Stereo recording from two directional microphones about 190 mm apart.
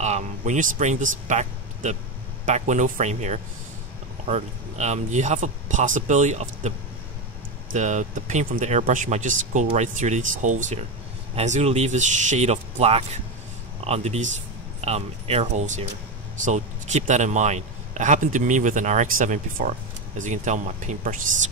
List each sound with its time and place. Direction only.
0.0 s a man's voice: 40° right (ahead or behind)
7.7 s a man's voice: 40° right (ahead or behind)